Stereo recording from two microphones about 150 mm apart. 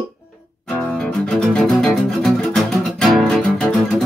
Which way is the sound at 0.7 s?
5° left (ahead or behind).